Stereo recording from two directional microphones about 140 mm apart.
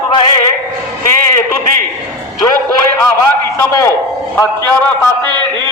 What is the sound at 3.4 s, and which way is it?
Speech, 20° left (ahead or behind).